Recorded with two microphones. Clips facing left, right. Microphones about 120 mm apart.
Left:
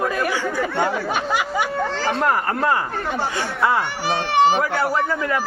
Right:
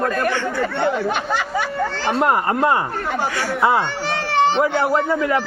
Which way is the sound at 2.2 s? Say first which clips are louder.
Right 5 dB; 25° right (ahead or behind).